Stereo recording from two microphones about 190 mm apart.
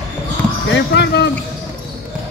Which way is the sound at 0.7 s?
65° left (ahead or behind).